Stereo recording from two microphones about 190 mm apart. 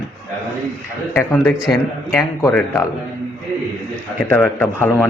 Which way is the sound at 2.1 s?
10° left (ahead or behind).